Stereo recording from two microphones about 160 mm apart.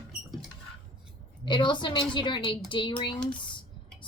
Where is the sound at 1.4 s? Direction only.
30° left (ahead or behind).